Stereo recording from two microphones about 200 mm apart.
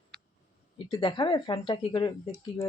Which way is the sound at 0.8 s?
25° left (ahead or behind).